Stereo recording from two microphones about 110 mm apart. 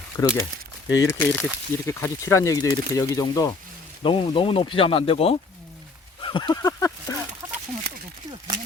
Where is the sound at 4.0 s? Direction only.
50° left (ahead or behind).